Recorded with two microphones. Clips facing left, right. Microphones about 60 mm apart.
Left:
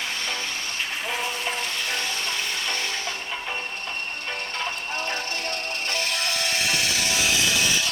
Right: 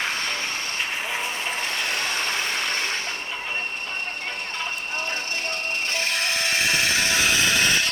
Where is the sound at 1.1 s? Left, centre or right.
Right.